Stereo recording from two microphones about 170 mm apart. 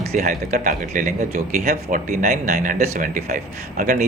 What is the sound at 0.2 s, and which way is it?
Speech, 50° right (ahead or behind).